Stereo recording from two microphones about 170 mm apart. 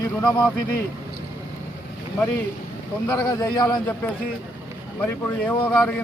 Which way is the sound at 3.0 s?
20° left (ahead or behind).